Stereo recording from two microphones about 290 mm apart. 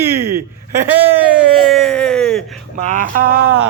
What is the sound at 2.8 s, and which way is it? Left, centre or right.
Speech, right.